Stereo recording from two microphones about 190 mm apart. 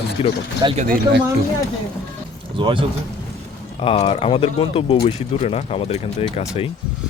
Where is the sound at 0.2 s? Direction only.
30° left (ahead or behind).